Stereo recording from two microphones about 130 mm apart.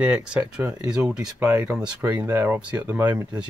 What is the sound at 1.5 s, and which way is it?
Speech, 15° right (ahead or behind).